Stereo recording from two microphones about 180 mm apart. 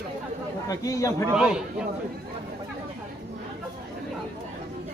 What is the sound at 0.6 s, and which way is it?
Speech, 20° left (ahead or behind).